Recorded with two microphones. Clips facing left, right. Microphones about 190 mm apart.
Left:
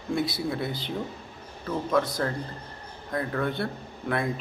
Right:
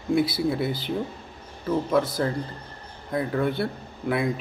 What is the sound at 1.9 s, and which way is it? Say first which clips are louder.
Speech: even; 5° right (ahead or behind).